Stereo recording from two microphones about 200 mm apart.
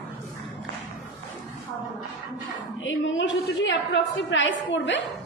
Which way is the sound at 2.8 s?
70° left (ahead or behind).